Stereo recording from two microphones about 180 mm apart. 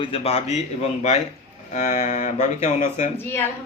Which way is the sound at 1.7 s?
40° left (ahead or behind).